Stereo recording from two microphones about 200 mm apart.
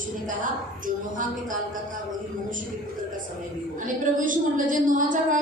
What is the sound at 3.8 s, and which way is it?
A woman's voice, 40° right (ahead or behind).